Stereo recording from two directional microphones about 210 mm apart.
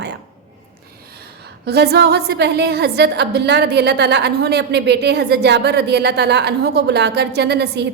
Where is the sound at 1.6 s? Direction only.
50° right (ahead or behind).